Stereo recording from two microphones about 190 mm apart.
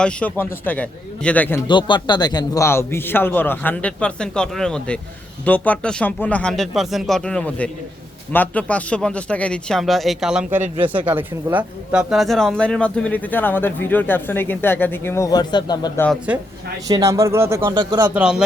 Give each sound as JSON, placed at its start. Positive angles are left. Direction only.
{"t": 0.0, "sound": "speech", "side_deg": 5}
{"t": 1.6, "sound": "speech", "side_deg": 25}
{"t": 16.3, "sound": "a man's voice", "side_deg": -10}